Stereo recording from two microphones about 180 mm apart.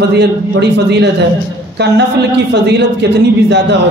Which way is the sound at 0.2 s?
70° right (ahead or behind).